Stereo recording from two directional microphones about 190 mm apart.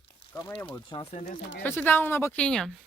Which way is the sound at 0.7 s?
25° left (ahead or behind).